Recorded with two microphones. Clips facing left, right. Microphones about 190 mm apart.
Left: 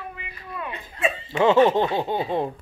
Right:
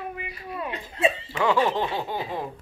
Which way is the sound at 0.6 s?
30° right (ahead or behind).